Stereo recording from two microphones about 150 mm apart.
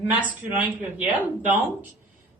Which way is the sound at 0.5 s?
10° right (ahead or behind).